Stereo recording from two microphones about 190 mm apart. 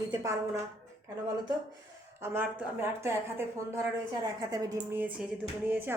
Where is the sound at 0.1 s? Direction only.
15° right (ahead or behind).